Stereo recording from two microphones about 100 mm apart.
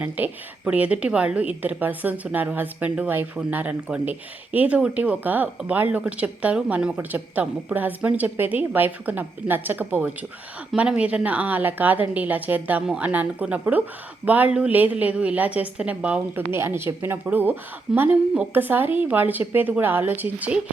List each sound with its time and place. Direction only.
0.0 s speech: 15° right (ahead or behind)
16.5 s a woman's voice: 25° right (ahead or behind)